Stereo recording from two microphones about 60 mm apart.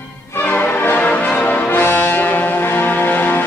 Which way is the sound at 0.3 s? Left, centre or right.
Left.